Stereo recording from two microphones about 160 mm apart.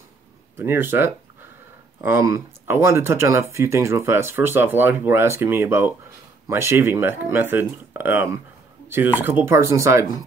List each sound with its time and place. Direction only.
0.6 s speech: 15° right (ahead or behind)
8.8 s a sound: 15° right (ahead or behind)
9.4 s speech: 15° right (ahead or behind)